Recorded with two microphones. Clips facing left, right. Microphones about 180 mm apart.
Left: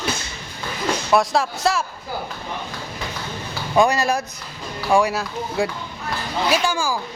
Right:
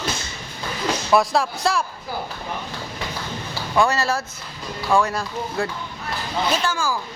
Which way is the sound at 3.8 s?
15° left (ahead or behind).